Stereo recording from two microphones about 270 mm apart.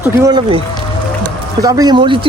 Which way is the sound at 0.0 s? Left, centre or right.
Centre.